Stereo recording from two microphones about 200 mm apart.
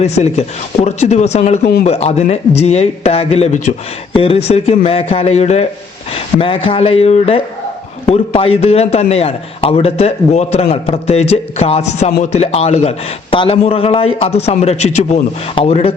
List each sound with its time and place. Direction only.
0.0 s a man's voice: 35° left (ahead or behind)
1.6 s a man's voice: 50° left (ahead or behind)
1.9 s a man's voice: 30° left (ahead or behind)